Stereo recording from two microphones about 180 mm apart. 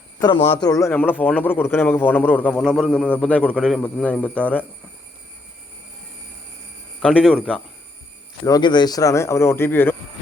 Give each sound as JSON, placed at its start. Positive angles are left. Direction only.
{"t": 0.6, "sound": "a man's voice", "side_deg": 20}
{"t": 7.0, "sound": "speech", "side_deg": 5}
{"t": 8.4, "sound": "a man's voice", "side_deg": 25}